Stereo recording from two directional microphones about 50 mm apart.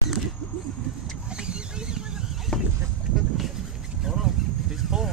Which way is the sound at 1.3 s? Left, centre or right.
Centre.